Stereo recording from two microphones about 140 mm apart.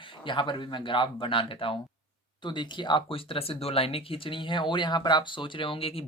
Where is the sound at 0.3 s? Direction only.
35° left (ahead or behind).